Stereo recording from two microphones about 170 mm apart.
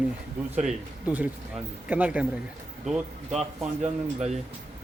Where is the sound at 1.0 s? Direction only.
10° right (ahead or behind).